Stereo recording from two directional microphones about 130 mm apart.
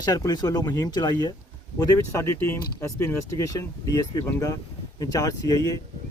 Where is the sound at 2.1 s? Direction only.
20° left (ahead or behind).